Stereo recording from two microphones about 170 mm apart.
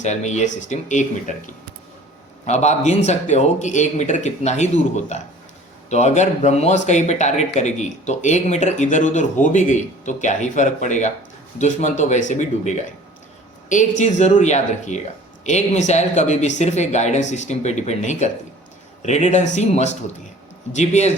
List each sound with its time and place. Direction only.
0.0 s speech: 45° left (ahead or behind)
2.5 s speech: 40° left (ahead or behind)